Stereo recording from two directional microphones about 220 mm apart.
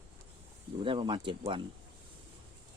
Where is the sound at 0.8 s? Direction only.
20° right (ahead or behind).